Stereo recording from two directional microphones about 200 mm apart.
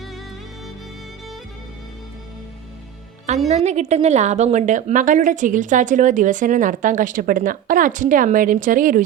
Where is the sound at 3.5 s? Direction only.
35° right (ahead or behind).